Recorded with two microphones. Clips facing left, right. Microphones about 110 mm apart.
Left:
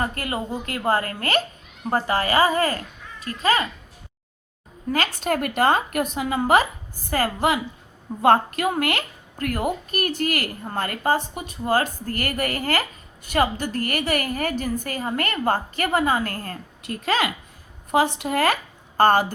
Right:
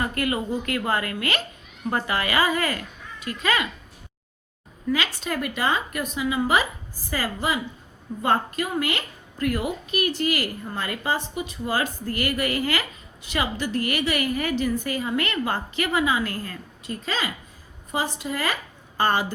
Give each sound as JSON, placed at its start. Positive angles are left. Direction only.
{"t": 0.0, "sound": "a woman's voice", "side_deg": 30}
{"t": 4.9, "sound": "a woman's voice", "side_deg": 50}